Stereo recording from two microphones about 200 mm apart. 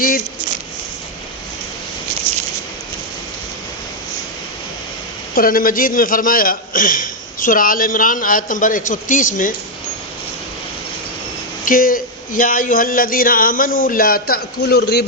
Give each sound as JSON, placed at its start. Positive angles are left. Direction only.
{"t": 5.3, "sound": "a man's voice", "side_deg": 45}
{"t": 11.6, "sound": "a man's voice", "side_deg": 45}